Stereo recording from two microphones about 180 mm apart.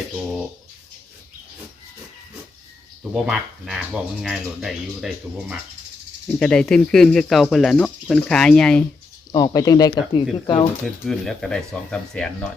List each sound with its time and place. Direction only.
3.0 s speech: centre (ahead or behind)
9.3 s speech: 20° left (ahead or behind)
10.8 s speech: centre (ahead or behind)